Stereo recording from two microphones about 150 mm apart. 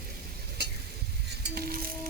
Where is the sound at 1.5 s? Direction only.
85° right.